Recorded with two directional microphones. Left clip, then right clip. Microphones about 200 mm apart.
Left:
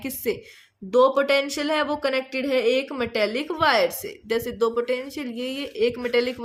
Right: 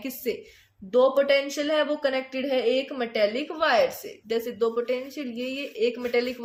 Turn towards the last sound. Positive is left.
turn(degrees=35)  # may be behind; listen again after turning